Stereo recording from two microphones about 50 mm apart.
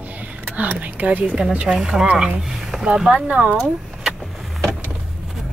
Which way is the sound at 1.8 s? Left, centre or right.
Centre.